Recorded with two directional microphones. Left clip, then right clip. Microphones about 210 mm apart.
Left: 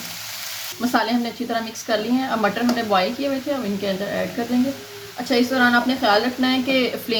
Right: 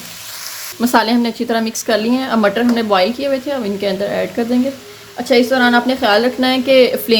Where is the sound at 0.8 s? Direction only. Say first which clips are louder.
Right 7 dB; 50° right (ahead or behind).